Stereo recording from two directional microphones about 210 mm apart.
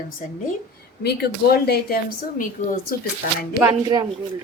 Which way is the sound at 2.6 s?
35° left (ahead or behind).